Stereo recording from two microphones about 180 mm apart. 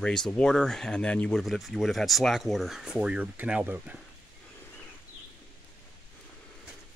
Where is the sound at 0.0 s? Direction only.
5° left (ahead or behind).